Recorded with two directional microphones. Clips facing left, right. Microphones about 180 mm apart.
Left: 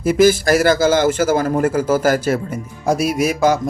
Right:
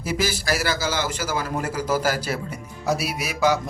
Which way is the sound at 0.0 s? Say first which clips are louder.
Left 13 dB; 50° left (ahead or behind).